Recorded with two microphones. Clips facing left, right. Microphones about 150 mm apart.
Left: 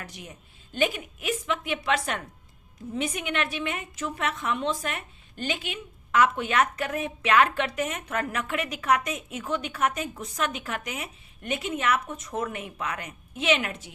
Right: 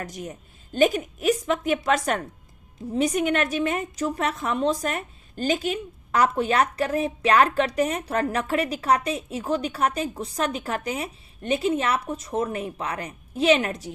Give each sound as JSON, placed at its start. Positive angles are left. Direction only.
{"t": 0.0, "sound": "a woman's voice", "side_deg": -45}